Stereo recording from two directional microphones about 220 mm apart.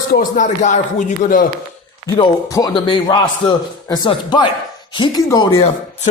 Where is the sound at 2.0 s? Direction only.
20° left (ahead or behind).